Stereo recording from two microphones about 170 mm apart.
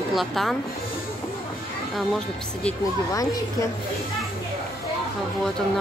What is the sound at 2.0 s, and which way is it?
Speech, centre (ahead or behind).